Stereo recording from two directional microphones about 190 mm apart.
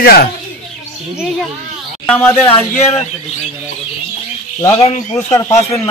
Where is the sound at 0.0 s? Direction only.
55° left (ahead or behind).